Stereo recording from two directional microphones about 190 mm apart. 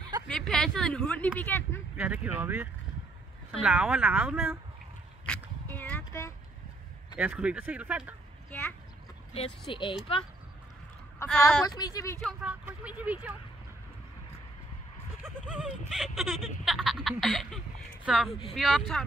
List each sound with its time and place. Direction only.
0.3 s speech: 5° left (ahead or behind)
2.0 s speech: 10° right (ahead or behind)
5.2 s a sound: 10° left (ahead or behind)
7.2 s speech: 5° right (ahead or behind)
8.5 s a sound: 10° left (ahead or behind)
9.3 s speech: 30° left (ahead or behind)
11.2 s speech: 10° left (ahead or behind)
12.2 s speech: centre (ahead or behind)
15.5 s speech: 5° right (ahead or behind)